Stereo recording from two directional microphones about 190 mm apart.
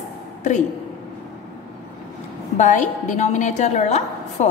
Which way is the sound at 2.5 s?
40° left (ahead or behind).